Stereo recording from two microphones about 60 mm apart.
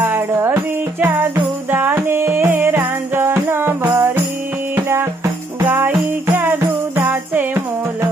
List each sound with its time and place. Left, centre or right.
0.0 s music: right